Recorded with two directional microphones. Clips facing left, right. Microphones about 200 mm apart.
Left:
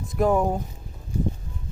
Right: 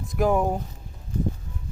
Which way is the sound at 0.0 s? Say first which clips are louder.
Left 1 dB; centre (ahead or behind).